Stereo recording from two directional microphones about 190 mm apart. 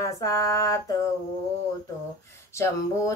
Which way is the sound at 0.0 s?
15° left (ahead or behind).